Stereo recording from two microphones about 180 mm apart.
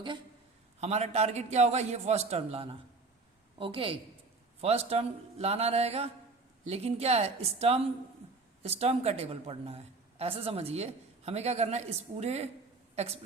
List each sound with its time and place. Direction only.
0.8 s a woman's voice: 35° right (ahead or behind)